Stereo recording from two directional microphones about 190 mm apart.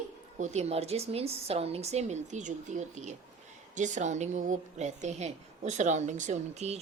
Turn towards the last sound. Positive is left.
turn(degrees=-35)  # may be behind; listen again after turning